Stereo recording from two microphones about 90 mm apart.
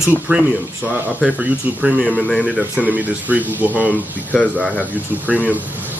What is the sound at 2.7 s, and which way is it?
Speech, 15° right (ahead or behind).